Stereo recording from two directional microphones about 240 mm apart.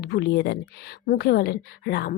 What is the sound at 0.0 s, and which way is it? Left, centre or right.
A woman's voice, left.